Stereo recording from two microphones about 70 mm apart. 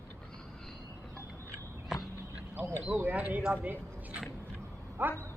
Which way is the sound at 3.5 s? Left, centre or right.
Right.